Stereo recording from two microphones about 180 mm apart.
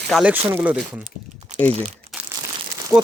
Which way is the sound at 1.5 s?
40° right (ahead or behind).